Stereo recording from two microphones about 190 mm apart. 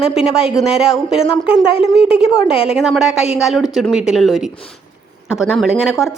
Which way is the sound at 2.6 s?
5° right (ahead or behind).